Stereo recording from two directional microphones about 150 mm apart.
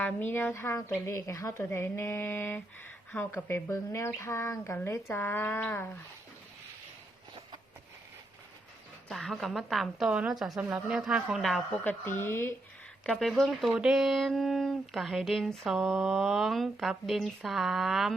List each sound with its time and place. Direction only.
0.0 s a woman's voice: 10° left (ahead or behind)
9.0 s speech: centre (ahead or behind)
11.8 s a woman's voice: 10° left (ahead or behind)
13.1 s speech: centre (ahead or behind)